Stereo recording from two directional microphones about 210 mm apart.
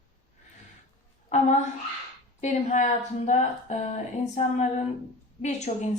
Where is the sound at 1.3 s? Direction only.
35° left (ahead or behind).